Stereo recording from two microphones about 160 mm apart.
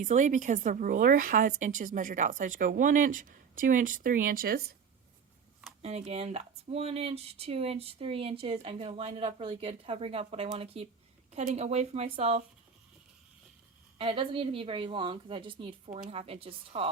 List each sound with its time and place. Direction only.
0.0 s speech: 50° right (ahead or behind); by 4.6 s 70° right (ahead or behind)
5.8 s speech: 40° right (ahead or behind)
14.0 s speech: 35° right (ahead or behind)